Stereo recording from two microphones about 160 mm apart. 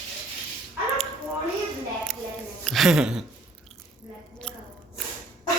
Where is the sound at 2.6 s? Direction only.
Centre (ahead or behind).